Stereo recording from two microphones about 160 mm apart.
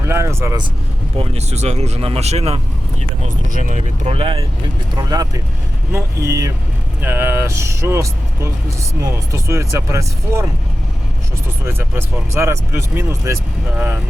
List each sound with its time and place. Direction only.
0.1 s speech: 15° right (ahead or behind)
1.2 s speech: 40° right (ahead or behind)
3.2 s speech: 55° right (ahead or behind); by 4.4 s 35° right (ahead or behind)
4.9 s speech: 25° right (ahead or behind)
11.6 s speech: 15° right (ahead or behind)